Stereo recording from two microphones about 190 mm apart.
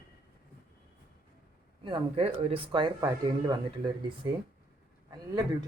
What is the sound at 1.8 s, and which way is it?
Speech, 30° right (ahead or behind).